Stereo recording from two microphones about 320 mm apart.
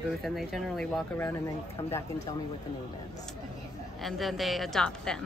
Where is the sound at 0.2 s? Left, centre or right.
Centre.